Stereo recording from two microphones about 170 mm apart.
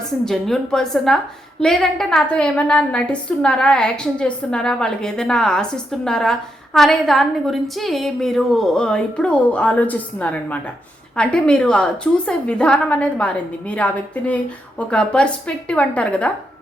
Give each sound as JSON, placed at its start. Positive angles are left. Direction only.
{"t": 0.3, "sound": "a woman's voice", "side_deg": 5}